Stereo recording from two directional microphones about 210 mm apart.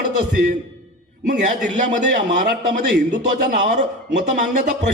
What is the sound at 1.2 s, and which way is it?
A man's voice, 35° right (ahead or behind).